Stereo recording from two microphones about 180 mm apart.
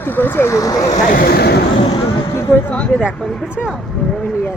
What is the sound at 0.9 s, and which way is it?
Speech, 50° left (ahead or behind).